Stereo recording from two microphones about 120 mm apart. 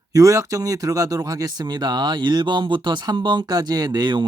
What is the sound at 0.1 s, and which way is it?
Speech, 30° right (ahead or behind).